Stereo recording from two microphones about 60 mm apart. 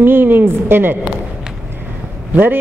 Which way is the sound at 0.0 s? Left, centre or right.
Right.